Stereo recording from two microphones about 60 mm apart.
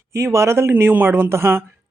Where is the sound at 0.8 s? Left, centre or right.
Right.